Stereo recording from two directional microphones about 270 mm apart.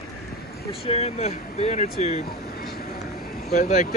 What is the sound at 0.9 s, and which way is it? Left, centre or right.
Speech, left.